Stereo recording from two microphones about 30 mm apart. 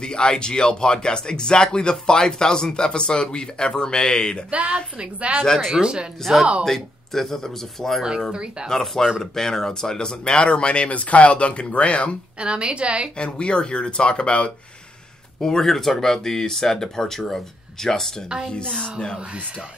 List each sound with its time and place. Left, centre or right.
0.0 s speech: left
4.5 s speech: right
5.8 s speech: right
6.6 s speech: centre
8.6 s speech: centre
10.2 s speech: left
12.4 s a woman's voice: right
13.2 s speech: left
15.4 s speech: centre
18.5 s speech: left